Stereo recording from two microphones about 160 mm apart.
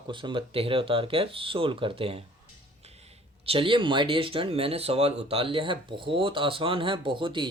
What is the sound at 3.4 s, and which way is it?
Speech, 35° right (ahead or behind).